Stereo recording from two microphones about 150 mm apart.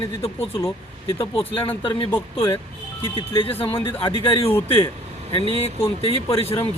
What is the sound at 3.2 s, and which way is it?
Speech, 35° left (ahead or behind).